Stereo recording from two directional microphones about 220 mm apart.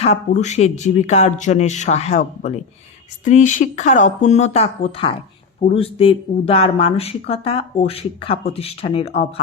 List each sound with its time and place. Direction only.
0.0 s speech: 30° left (ahead or behind)